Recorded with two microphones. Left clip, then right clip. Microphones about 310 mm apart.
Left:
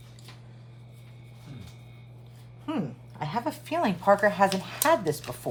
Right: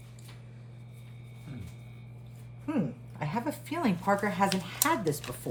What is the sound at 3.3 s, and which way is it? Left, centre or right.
Speech, centre.